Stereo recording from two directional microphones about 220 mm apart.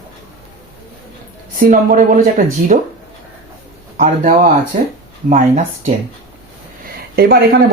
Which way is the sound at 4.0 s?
40° right (ahead or behind).